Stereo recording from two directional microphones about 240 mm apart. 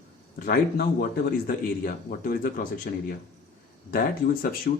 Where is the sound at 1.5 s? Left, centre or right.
Left.